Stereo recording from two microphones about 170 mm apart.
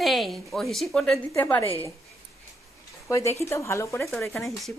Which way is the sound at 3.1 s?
15° left (ahead or behind).